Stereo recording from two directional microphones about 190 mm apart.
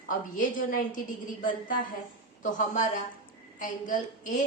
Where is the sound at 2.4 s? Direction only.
40° left (ahead or behind).